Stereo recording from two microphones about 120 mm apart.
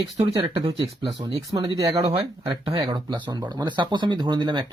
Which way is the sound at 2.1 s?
45° right (ahead or behind).